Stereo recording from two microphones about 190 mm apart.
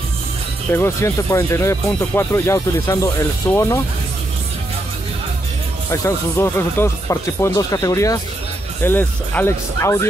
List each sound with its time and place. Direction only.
0.7 s speech: 10° left (ahead or behind)
5.9 s speech: 15° left (ahead or behind)